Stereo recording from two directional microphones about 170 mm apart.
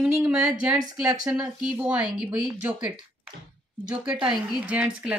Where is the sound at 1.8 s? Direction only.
25° right (ahead or behind).